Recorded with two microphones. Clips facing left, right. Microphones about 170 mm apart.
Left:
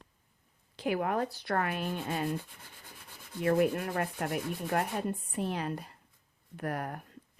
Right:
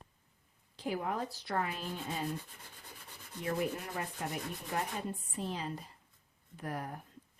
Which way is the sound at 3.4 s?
60° left (ahead or behind).